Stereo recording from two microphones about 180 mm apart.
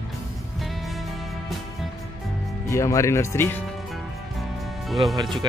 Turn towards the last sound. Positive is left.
turn(degrees=0)  # may be behind; listen again after turning